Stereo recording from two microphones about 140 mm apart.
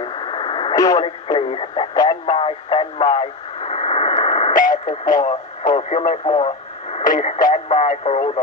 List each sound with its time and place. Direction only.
0.0 s radio: 35° left (ahead or behind)
0.7 s radio: 25° left (ahead or behind)
1.0 s speech: 40° left (ahead or behind)
2.0 s radio: 40° left (ahead or behind)
4.6 s speech: 75° left (ahead or behind)
5.9 s speech: 55° left (ahead or behind)
6.2 s radio: 40° left (ahead or behind)
7.0 s speech: 65° left (ahead or behind)
7.6 s speech: 50° left (ahead or behind)